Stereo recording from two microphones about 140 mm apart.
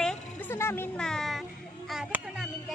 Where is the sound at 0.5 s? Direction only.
15° left (ahead or behind).